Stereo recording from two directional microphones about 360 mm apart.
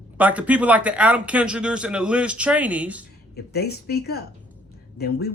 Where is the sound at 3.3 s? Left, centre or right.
Left.